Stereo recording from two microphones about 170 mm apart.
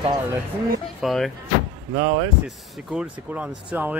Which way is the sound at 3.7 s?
10° right (ahead or behind).